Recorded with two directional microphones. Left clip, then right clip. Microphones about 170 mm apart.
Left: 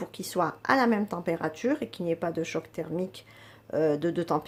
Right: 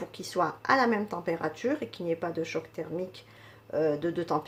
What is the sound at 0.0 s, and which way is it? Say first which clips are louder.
Speech: left 1 dB; 30° left (ahead or behind).